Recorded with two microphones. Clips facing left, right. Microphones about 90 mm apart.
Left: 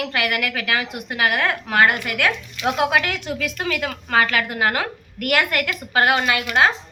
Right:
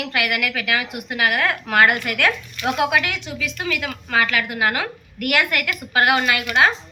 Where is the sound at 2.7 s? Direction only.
30° left (ahead or behind).